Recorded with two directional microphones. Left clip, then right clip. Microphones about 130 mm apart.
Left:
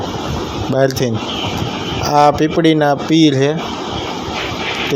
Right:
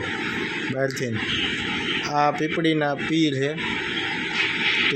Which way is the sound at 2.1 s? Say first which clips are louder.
Left 12 dB; 40° left (ahead or behind).